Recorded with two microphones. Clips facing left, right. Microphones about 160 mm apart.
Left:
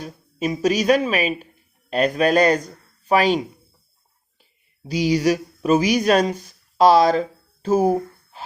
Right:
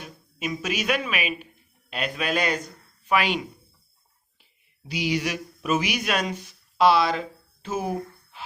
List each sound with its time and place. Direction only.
0.0 s speech: 35° left (ahead or behind)